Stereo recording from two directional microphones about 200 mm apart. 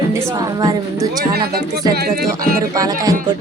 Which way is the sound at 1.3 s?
50° right (ahead or behind).